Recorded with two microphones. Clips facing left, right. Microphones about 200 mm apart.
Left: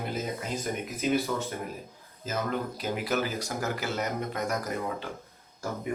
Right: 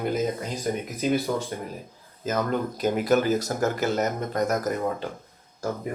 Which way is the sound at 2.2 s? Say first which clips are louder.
Right 5 dB; 50° right (ahead or behind).